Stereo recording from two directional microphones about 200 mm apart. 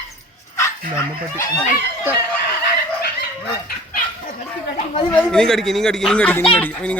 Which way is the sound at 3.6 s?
45° left (ahead or behind).